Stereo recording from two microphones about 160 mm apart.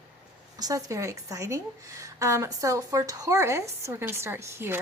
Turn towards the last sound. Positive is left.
turn(degrees=-15)  # may be behind; listen again after turning